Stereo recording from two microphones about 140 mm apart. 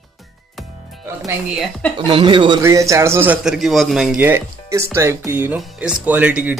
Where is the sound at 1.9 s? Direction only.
35° right (ahead or behind).